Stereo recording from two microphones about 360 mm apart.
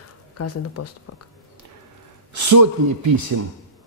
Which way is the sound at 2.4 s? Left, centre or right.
Right.